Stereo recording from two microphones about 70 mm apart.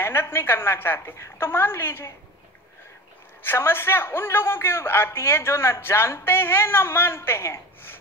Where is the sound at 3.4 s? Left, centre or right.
Left.